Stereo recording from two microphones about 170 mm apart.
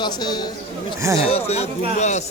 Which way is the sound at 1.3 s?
40° left (ahead or behind).